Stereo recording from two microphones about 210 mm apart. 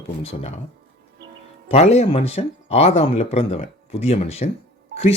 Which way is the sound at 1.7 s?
30° left (ahead or behind).